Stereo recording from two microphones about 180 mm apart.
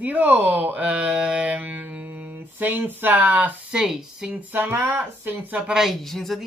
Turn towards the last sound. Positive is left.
turn(degrees=0)  # may be behind; listen again after turning